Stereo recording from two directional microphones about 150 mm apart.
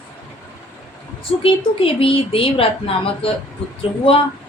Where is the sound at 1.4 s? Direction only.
35° left (ahead or behind).